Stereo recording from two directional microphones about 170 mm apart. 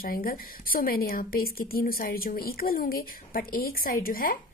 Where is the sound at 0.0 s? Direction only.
60° left (ahead or behind).